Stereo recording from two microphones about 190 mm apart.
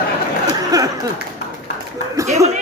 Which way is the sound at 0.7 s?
20° right (ahead or behind).